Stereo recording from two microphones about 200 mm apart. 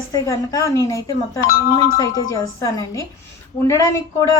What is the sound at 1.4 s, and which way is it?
Speech, 45° left (ahead or behind).